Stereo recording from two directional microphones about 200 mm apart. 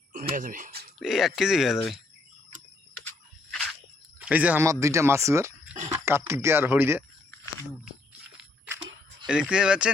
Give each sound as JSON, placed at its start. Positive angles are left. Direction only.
{"t": 0.3, "sound": "speech", "side_deg": -40}
{"t": 0.9, "sound": "speech", "side_deg": 0}
{"t": 3.5, "sound": "a sound", "side_deg": 0}
{"t": 4.3, "sound": "speech", "side_deg": -10}
{"t": 9.2, "sound": "speech", "side_deg": -5}